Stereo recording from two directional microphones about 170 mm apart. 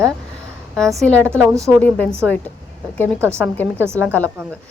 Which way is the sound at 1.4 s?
15° right (ahead or behind).